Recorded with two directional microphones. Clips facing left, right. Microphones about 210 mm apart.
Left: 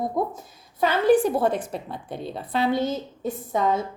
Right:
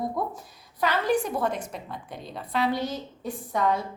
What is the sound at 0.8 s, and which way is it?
A woman's voice, 30° left (ahead or behind).